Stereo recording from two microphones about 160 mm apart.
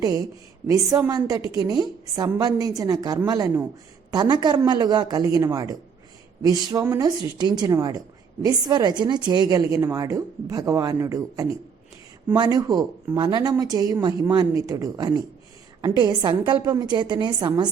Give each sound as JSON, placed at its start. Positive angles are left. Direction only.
{"t": 0.0, "sound": "a woman's voice", "side_deg": -20}